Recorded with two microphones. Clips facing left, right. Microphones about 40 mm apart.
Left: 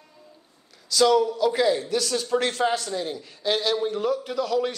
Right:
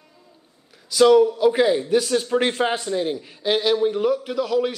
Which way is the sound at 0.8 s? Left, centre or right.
Centre.